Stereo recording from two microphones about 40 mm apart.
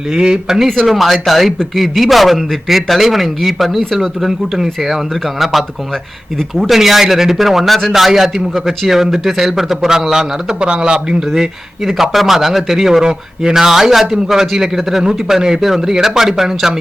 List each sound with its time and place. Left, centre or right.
0.2 s a man's voice: centre
0.8 s a man's voice: centre
10.6 s a man's voice: right
11.9 s a man's voice: centre